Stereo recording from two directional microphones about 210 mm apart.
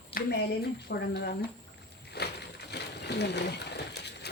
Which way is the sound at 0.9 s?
50° left (ahead or behind).